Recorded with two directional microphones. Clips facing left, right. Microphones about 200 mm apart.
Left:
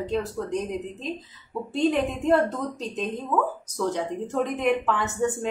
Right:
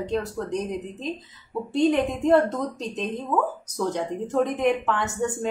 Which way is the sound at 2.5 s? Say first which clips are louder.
Right 2 dB; centre (ahead or behind).